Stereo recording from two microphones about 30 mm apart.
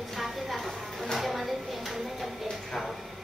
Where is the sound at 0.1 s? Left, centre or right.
Centre.